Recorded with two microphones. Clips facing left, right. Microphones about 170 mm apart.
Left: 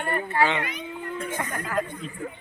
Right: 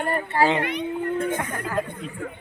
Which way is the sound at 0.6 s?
60° right (ahead or behind).